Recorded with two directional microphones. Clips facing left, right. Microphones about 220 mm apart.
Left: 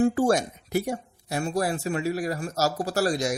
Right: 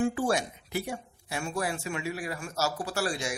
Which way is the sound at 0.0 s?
45° left (ahead or behind).